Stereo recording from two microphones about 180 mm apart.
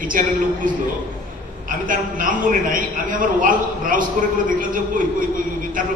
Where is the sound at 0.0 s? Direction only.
50° right (ahead or behind).